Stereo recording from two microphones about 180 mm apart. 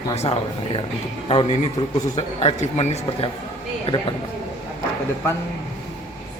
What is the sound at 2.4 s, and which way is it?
A man's voice, 35° left (ahead or behind).